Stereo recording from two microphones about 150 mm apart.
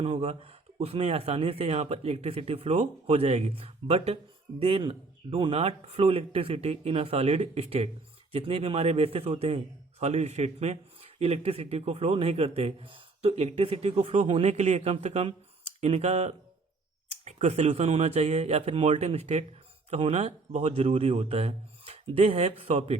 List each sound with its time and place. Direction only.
0.0 s a man's voice: 40° right (ahead or behind)